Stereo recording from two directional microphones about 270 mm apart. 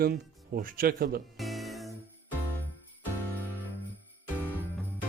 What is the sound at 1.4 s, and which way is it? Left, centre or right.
Music, centre.